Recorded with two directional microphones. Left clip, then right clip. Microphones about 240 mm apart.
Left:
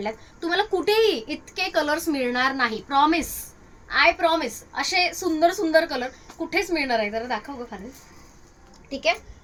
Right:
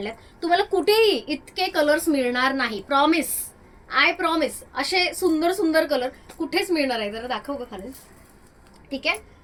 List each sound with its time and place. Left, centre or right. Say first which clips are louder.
0.0 s a woman's voice: even; centre
8.9 s speech: left 2 dB; left